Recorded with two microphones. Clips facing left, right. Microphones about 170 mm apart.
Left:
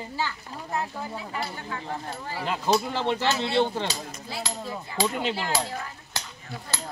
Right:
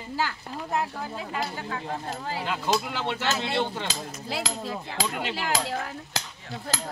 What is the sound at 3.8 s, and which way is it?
Speech, 90° right.